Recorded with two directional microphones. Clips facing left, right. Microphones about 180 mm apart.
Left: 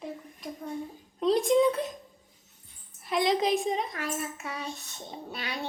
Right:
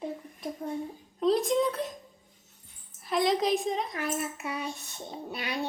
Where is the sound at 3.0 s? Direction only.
Centre (ahead or behind).